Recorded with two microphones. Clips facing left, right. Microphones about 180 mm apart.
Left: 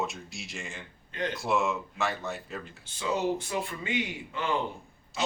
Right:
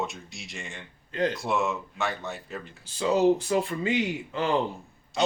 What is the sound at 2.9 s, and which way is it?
Speech, 35° right (ahead or behind).